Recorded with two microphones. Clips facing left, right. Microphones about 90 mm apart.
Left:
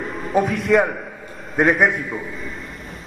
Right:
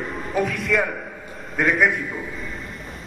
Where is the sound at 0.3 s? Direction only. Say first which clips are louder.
Left 4 dB; 30° left (ahead or behind).